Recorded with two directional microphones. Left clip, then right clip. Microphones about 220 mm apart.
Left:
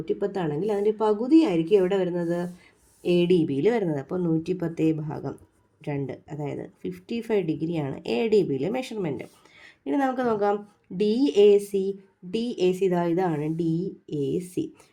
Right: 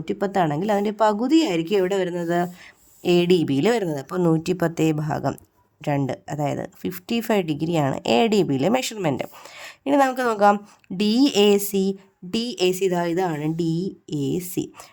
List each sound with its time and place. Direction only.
0.0 s a woman's voice: 40° right (ahead or behind)